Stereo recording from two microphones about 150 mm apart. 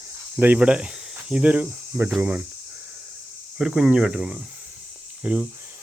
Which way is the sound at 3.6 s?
5° right (ahead or behind).